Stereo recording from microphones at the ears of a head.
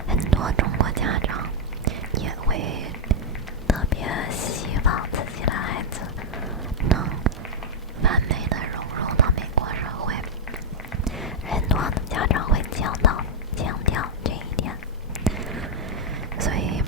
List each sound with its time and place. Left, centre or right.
0.2 s whispering: right
4.0 s whispering: left
6.8 s whispering: right
11.7 s whispering: left
16.4 s thunder: right